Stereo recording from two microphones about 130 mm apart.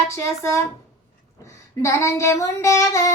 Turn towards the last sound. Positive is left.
turn(degrees=25)  # may be behind; listen again after turning